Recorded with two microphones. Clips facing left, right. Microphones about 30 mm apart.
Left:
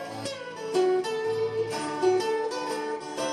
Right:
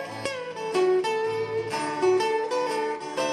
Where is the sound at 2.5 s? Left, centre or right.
Right.